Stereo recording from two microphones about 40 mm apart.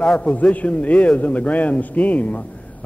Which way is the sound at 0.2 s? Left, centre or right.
Left.